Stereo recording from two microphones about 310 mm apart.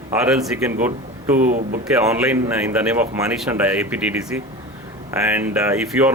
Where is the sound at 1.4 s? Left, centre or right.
Right.